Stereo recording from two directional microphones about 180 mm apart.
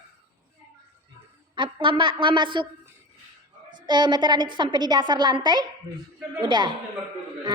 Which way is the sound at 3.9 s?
25° right (ahead or behind).